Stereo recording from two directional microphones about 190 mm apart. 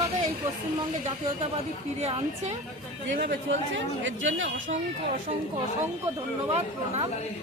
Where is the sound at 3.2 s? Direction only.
65° right (ahead or behind).